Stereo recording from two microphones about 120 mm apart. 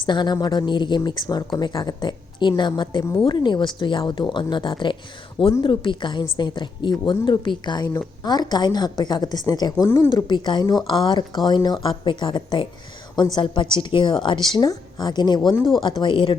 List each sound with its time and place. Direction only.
0.0 s a woman's voice: 40° left (ahead or behind)
10.2 s a woman's voice: 40° left (ahead or behind)